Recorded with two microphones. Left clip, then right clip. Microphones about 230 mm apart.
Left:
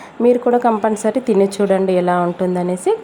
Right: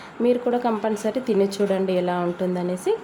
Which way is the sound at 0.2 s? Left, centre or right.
Centre.